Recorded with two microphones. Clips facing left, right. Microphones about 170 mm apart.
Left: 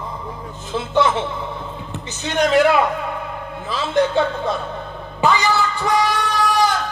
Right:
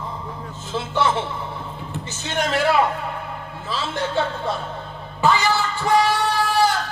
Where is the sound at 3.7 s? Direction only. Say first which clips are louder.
Left 7 dB; 20° left (ahead or behind).